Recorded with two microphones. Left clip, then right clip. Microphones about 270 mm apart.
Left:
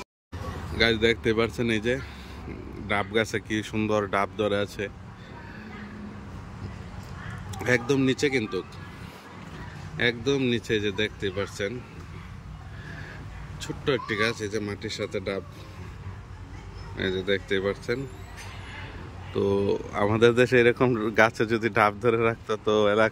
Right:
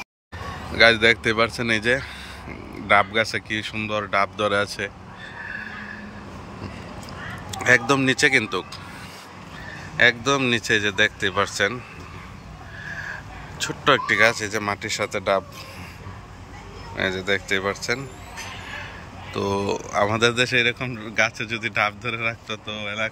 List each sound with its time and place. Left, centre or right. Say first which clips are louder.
0.7 s speech: right 7 dB; centre
7.5 s speech: right 7 dB; centre
9.9 s speech: right 7 dB; centre
13.6 s speech: right 8 dB; centre
16.9 s speech: right 4 dB; centre
19.3 s speech: even; centre